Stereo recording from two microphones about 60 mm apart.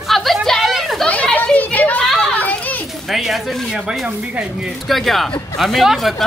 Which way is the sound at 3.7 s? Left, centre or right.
Centre.